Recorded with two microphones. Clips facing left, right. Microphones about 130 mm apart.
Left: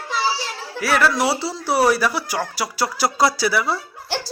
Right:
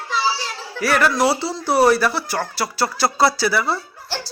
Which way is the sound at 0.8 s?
5° left (ahead or behind).